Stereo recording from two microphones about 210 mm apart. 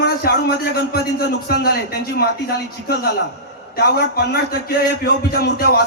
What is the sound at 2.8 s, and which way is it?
A man's voice, 45° left (ahead or behind).